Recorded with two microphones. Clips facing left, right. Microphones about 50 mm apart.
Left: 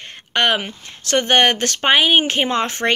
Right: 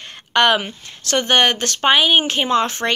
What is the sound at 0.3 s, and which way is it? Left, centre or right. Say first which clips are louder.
Speech: right 3 dB; left.